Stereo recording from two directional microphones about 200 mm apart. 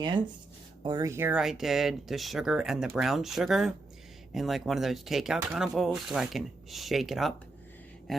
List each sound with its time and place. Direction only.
0.0 s speech: 25° right (ahead or behind); by 7.3 s centre (ahead or behind)